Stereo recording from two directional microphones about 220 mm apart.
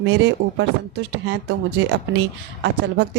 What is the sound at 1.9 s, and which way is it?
Speech, 50° right (ahead or behind).